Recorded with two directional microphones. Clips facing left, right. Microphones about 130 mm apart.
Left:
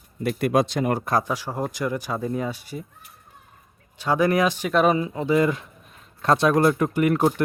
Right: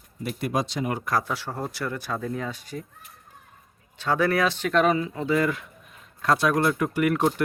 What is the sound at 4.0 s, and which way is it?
Speech, 15° left (ahead or behind).